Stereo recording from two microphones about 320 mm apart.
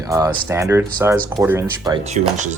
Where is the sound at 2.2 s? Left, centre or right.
Right.